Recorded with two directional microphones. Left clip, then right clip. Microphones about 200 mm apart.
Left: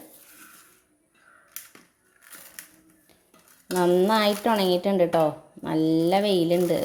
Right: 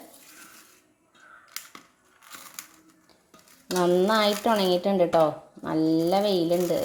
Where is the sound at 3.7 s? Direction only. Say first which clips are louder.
Left 1 dB; 10° left (ahead or behind).